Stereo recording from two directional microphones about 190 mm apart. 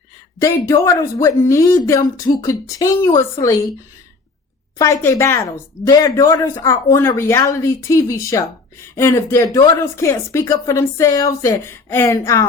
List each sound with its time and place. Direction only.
0.4 s speech: 15° left (ahead or behind)
4.8 s speech: 15° left (ahead or behind)